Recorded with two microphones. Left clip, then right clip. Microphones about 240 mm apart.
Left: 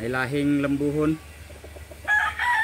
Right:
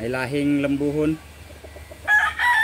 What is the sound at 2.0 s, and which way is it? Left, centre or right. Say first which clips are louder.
Chicken: right 4 dB; right.